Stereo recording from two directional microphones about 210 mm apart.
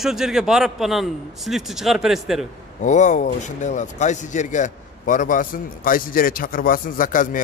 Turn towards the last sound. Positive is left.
turn(degrees=40)  # may be behind; listen again after turning